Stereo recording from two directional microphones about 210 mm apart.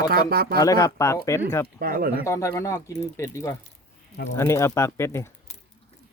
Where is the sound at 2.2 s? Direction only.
15° left (ahead or behind).